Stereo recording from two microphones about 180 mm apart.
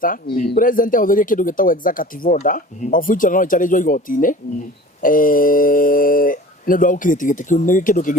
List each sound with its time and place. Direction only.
0.0 s speech: 50° left (ahead or behind)